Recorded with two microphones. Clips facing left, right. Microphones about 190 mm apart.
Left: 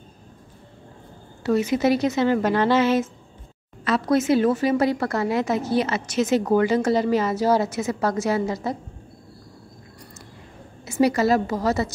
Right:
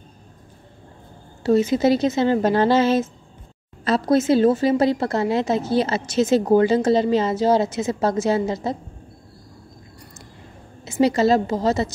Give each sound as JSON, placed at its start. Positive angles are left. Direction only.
{"t": 1.4, "sound": "speech", "side_deg": -30}
{"t": 10.9, "sound": "speech", "side_deg": -25}